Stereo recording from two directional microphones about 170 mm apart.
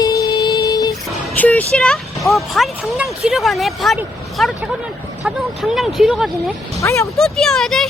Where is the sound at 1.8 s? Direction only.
Centre (ahead or behind).